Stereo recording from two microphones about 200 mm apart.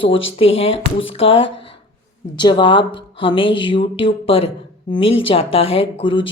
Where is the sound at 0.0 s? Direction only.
25° left (ahead or behind).